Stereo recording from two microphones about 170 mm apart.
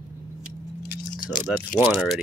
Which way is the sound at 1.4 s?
Centre (ahead or behind).